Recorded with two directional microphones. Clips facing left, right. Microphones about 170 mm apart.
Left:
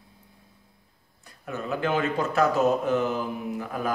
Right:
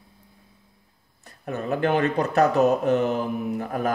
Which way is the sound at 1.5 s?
60° right (ahead or behind).